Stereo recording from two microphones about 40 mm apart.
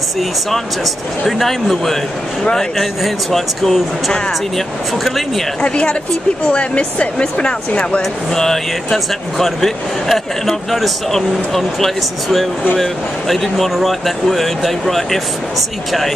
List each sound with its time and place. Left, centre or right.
1.2 s speech: centre
3.0 s speech: centre
5.0 s speech: centre
5.6 s speech: left
8.4 s speech: centre